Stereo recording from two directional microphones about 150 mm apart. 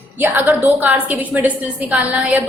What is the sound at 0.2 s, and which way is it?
A woman's voice, 15° right (ahead or behind).